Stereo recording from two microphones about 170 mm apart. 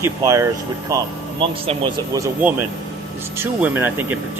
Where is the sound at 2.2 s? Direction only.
15° right (ahead or behind).